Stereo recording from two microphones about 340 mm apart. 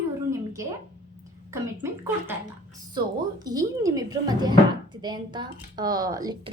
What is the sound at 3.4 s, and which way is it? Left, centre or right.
A woman's voice, centre.